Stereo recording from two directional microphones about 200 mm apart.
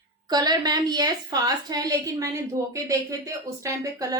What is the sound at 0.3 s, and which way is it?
A woman's voice, 20° right (ahead or behind).